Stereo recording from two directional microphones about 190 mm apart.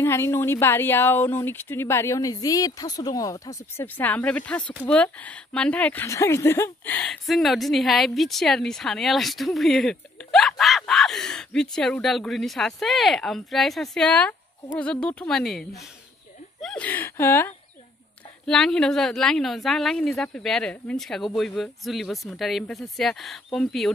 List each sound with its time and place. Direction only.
0.0 s speech: 15° left (ahead or behind)
16.6 s speech: 5° left (ahead or behind)